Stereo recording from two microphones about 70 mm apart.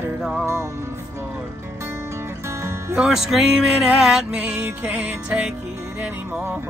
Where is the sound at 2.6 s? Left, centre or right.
Right.